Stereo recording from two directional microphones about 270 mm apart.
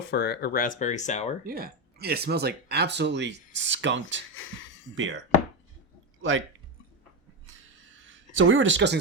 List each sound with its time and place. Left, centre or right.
0.1 s speech: left
1.5 s speech: right
4.4 s speech: left
4.9 s speech: right
8.0 s speech: right